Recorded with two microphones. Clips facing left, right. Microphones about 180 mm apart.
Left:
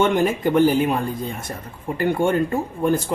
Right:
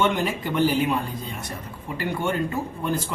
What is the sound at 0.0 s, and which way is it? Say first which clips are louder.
Speech: left 5 dB; 50° left (ahead or behind).